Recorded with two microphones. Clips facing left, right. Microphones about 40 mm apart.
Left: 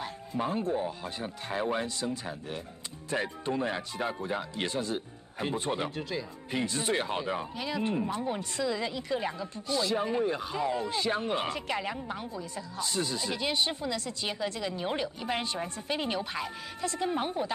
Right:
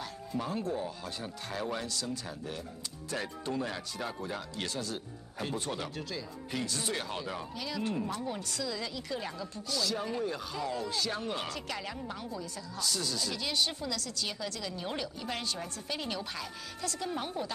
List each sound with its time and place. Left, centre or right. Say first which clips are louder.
0.0 s speech: left 4 dB; left